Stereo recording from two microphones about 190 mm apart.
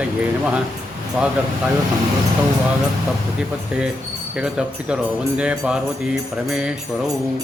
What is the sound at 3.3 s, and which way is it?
A man's voice, 5° right (ahead or behind).